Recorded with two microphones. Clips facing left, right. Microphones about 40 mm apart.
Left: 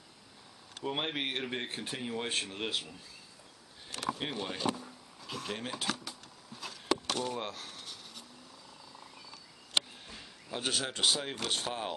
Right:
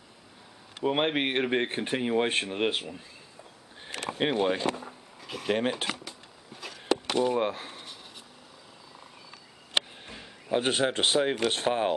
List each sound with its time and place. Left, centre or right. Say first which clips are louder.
0.7 s speech: right 9 dB; right
4.1 s speech: right 10 dB; right
5.2 s a sound: right 2 dB; centre
5.5 s speech: right 13 dB; right
7.1 s a sound: right 9 dB; right
10.1 s speech: right 13 dB; right